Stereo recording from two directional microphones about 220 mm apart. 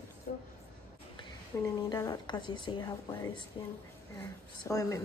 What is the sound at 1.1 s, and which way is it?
A woman's voice, 15° left (ahead or behind).